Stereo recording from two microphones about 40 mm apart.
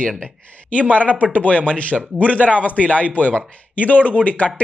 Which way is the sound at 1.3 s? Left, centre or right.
Left.